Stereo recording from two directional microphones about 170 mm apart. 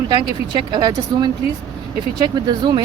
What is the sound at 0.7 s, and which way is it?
Speech, 25° right (ahead or behind).